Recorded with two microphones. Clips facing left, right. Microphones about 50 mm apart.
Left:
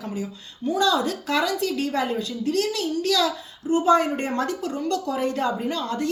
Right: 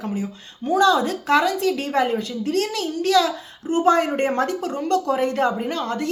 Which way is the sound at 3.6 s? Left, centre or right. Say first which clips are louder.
Right 1 dB; right.